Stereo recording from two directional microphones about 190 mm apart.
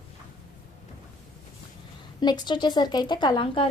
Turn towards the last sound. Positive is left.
turn(degrees=25)  # may be behind; listen again after turning